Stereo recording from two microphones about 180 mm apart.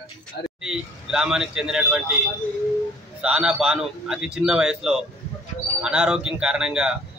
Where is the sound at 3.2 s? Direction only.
5° right (ahead or behind).